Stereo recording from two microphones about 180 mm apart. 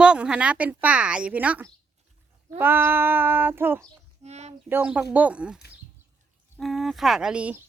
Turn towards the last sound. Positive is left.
turn(degrees=-5)  # may be behind; listen again after turning